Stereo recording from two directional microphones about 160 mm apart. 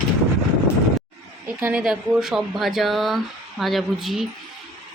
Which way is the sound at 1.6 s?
5° right (ahead or behind).